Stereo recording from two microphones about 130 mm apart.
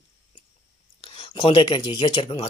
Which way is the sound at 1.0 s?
45° left (ahead or behind).